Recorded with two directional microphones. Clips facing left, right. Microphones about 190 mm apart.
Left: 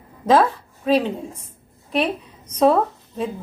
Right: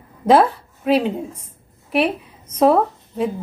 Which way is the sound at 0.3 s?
10° right (ahead or behind).